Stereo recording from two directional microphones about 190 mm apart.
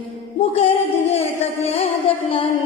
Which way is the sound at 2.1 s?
30° left (ahead or behind).